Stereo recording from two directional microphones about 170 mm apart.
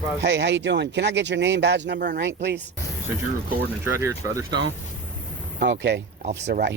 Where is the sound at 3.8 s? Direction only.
15° right (ahead or behind).